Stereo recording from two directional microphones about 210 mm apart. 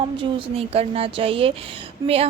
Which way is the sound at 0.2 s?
25° right (ahead or behind).